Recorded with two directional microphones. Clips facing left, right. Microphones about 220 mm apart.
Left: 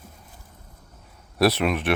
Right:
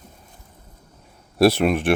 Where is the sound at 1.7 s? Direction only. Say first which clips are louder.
Right 4 dB; 45° right (ahead or behind).